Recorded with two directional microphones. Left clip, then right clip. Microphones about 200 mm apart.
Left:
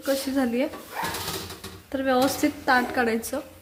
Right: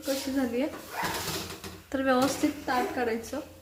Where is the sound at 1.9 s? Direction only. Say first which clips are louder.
Left 3 dB; 5° left (ahead or behind).